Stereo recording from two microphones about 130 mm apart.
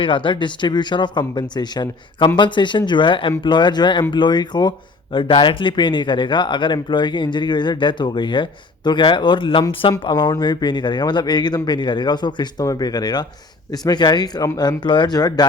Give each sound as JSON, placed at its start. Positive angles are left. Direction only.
{"t": 0.0, "sound": "speech", "side_deg": 40}